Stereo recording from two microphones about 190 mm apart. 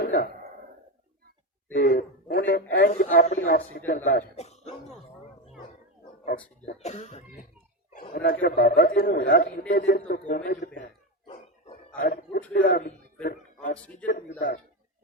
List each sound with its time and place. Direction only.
0.0 s a sound: 55° left (ahead or behind)
1.7 s speech: 50° left (ahead or behind)
6.3 s speech: 35° left (ahead or behind)
8.1 s a man's voice: 50° left (ahead or behind)
11.9 s a man's voice: 50° left (ahead or behind)
14.0 s a man's voice: 45° left (ahead or behind)